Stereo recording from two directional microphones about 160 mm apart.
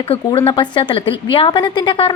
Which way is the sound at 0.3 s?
30° left (ahead or behind).